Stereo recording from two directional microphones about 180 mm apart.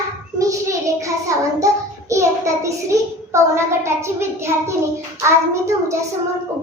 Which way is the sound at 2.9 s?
15° right (ahead or behind).